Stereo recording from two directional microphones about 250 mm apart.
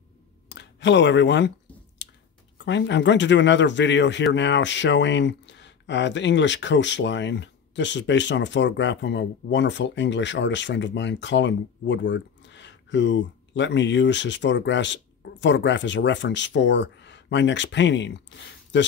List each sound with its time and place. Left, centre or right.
0.5 s speech: left
2.0 s chewing: left
2.6 s a man's voice: left